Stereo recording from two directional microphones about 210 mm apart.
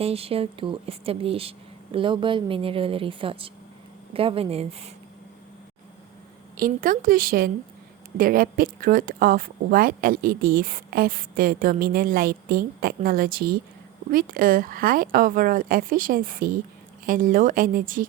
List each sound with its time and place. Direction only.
0.0 s speech: 30° right (ahead or behind)
6.6 s speech: 40° right (ahead or behind)